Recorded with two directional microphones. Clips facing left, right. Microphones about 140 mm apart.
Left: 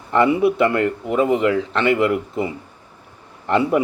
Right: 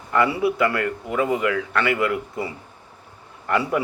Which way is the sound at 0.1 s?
25° left (ahead or behind).